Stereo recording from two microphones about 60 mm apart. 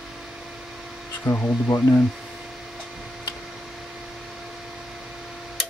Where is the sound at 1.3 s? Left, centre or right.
Left.